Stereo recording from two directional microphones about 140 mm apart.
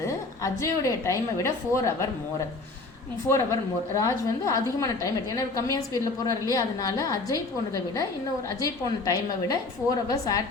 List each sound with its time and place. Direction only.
0.0 s a woman's voice: 20° left (ahead or behind)
3.2 s a woman's voice: 20° left (ahead or behind)